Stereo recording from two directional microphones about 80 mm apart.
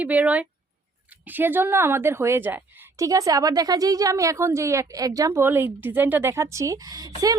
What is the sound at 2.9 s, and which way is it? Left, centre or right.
A woman's voice, right.